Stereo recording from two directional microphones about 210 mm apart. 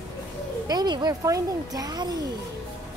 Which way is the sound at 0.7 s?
20° right (ahead or behind).